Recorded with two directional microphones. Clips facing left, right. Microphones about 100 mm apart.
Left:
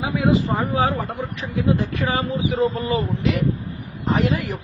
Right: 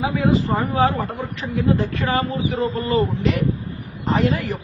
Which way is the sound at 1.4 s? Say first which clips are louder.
Right 2 dB; 15° left (ahead or behind).